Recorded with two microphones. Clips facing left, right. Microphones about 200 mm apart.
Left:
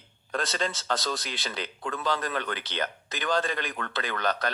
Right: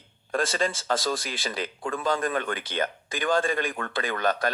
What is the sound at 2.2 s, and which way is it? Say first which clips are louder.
A man's voice: right 4 dB; 50° right (ahead or behind).